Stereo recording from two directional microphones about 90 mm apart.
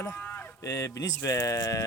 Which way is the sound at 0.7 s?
35° left (ahead or behind).